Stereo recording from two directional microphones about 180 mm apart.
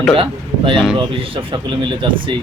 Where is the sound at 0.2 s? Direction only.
30° right (ahead or behind).